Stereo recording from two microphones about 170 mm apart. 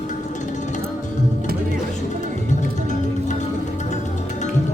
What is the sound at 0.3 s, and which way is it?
Music, 45° left (ahead or behind).